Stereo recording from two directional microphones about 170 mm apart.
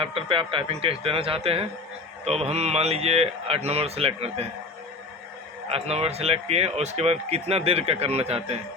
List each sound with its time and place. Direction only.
0.0 s speech: 35° right (ahead or behind)
5.6 s speech: 35° right (ahead or behind)